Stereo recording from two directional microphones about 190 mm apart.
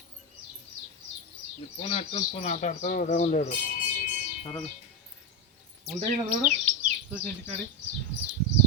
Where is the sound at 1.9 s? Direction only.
30° left (ahead or behind).